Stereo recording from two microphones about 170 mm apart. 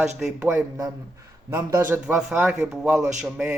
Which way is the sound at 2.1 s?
Centre (ahead or behind).